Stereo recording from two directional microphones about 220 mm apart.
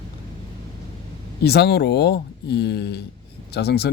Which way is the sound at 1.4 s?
50° left (ahead or behind).